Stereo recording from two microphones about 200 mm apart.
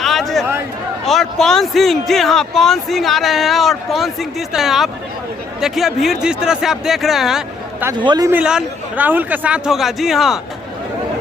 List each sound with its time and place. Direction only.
0.0 s a sound: centre (ahead or behind)
1.0 s a man's voice: centre (ahead or behind)
7.9 s a man's voice: 20° right (ahead or behind)
8.3 s a man's voice: 5° right (ahead or behind)